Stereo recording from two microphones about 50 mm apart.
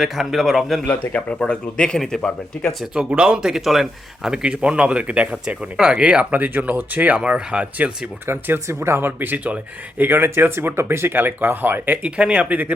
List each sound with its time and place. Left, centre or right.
0.0 s a man's voice: centre
0.9 s speech: left
3.1 s speech: centre
4.4 s speech: right
6.3 s speech: right
7.2 s speech: centre
8.3 s speech: right
8.6 s speech: right
10.0 s speech: right
12.0 s speech: right